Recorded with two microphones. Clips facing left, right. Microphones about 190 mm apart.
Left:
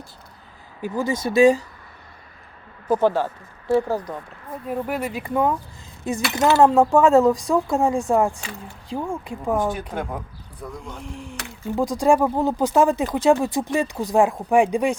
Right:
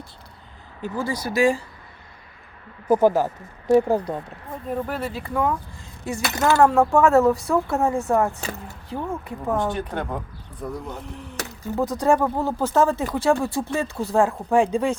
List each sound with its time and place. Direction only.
0.8 s speech: 15° left (ahead or behind)
2.8 s speech: 10° right (ahead or behind)
4.6 s speech: 10° left (ahead or behind)
8.4 s speech: 40° right (ahead or behind)
8.9 s speech: 15° left (ahead or behind)
10.6 s speech: centre (ahead or behind)
11.8 s speech: 10° left (ahead or behind)